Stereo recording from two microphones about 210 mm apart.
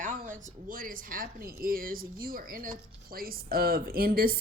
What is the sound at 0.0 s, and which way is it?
Speech, 40° right (ahead or behind).